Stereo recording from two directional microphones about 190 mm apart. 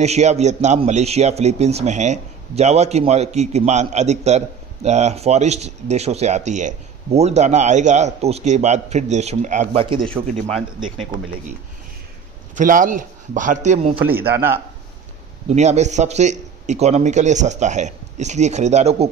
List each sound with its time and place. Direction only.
0.0 s speech: 35° right (ahead or behind)
10.5 s speech: centre (ahead or behind)
12.5 s speech: 45° right (ahead or behind)
13.9 s a man's voice: 10° right (ahead or behind)
15.4 s speech: 35° right (ahead or behind)